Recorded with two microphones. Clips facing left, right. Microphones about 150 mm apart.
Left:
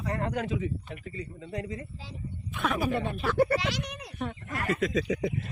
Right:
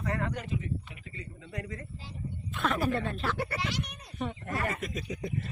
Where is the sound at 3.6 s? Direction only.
90° left.